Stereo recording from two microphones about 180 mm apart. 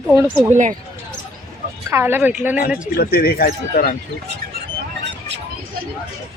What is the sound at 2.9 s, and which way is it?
Speech, 55° left (ahead or behind).